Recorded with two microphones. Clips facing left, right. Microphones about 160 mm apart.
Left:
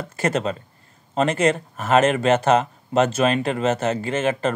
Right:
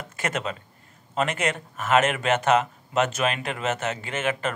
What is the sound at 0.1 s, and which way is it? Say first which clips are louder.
Speech: left 6 dB; 35° left (ahead or behind).